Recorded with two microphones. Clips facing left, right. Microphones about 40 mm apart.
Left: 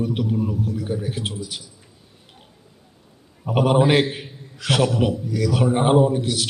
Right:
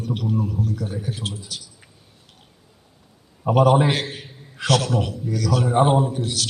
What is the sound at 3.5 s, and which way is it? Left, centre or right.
A man's voice, centre.